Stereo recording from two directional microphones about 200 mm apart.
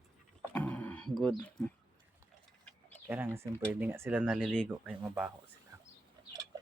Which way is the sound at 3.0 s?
10° right (ahead or behind).